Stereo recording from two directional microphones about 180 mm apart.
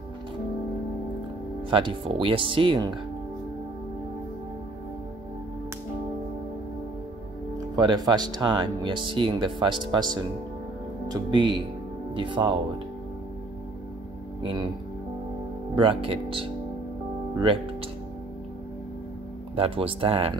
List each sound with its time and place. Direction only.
1.7 s speech: 30° right (ahead or behind)
7.7 s speech: 20° right (ahead or behind)
14.4 s speech: 25° right (ahead or behind)
15.7 s speech: 30° right (ahead or behind)
19.5 s speech: 30° right (ahead or behind)